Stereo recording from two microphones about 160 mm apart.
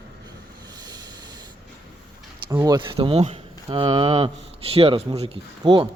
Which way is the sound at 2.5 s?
25° right (ahead or behind).